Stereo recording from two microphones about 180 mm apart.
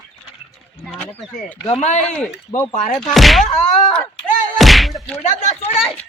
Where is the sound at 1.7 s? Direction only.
40° left (ahead or behind).